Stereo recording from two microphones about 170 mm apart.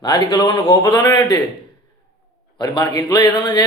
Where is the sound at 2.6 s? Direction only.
25° left (ahead or behind).